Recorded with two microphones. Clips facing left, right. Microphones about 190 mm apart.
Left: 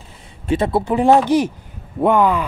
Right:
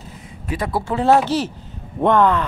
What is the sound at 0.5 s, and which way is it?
Speech, 25° left (ahead or behind).